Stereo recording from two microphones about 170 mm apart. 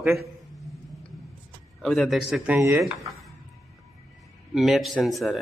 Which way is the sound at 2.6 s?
15° right (ahead or behind).